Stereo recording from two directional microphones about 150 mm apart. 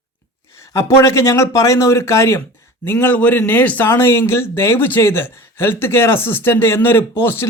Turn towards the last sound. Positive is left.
turn(degrees=15)  # may be behind; listen again after turning